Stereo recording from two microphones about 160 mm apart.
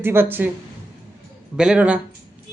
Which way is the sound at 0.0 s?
15° right (ahead or behind).